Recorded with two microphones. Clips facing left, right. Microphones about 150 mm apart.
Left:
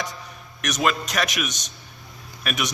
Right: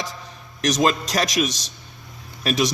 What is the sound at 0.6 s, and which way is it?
A man's voice, 35° right (ahead or behind).